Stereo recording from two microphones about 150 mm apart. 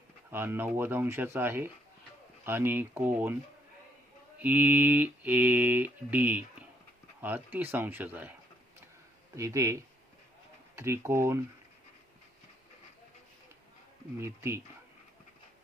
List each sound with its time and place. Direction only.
0.3 s mantra: 15° right (ahead or behind)
4.4 s mantra: 10° right (ahead or behind)
9.3 s speech: 20° right (ahead or behind)
10.8 s mantra: 15° right (ahead or behind)
14.2 s mantra: 15° right (ahead or behind)